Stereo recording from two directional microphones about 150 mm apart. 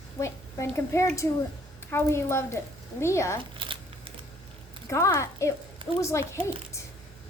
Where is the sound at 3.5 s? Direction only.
35° right (ahead or behind).